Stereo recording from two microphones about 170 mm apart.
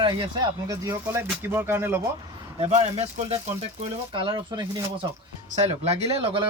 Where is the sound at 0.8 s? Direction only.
15° right (ahead or behind).